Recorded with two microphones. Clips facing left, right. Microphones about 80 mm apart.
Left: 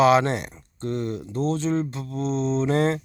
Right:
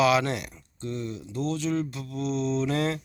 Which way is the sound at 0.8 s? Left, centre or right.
Left.